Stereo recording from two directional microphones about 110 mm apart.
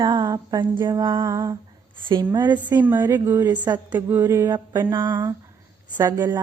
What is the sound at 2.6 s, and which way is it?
Speech, 15° right (ahead or behind).